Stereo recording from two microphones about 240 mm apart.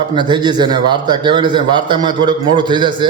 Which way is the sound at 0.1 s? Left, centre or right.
Centre.